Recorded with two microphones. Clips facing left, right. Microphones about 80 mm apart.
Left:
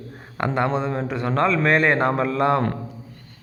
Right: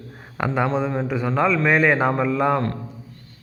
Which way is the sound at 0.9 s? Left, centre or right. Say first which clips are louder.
Right 1 dB; centre.